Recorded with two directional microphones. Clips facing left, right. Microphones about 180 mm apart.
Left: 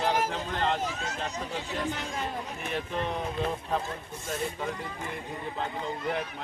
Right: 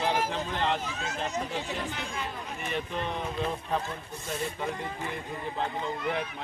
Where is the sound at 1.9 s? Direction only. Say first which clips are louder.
Left 2 dB; 45° left (ahead or behind).